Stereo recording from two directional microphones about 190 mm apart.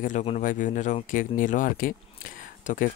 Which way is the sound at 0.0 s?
35° left (ahead or behind).